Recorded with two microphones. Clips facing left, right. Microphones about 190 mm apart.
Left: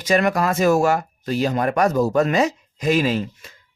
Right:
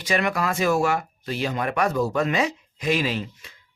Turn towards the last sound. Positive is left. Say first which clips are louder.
# left 6 dB
turn(degrees=45)  # may be behind; listen again after turning